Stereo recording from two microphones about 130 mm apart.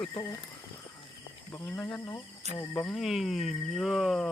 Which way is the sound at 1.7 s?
20° left (ahead or behind).